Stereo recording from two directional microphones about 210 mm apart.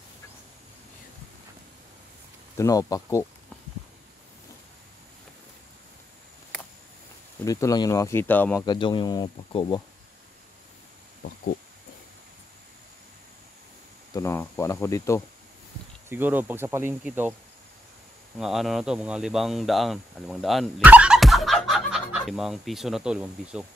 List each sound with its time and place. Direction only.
2.5 s speech: 15° left (ahead or behind)
7.4 s speech: 15° left (ahead or behind)
8.6 s speech: 20° left (ahead or behind)
14.1 s speech: 15° left (ahead or behind)
16.1 s speech: 10° right (ahead or behind)
18.4 s speech: centre (ahead or behind)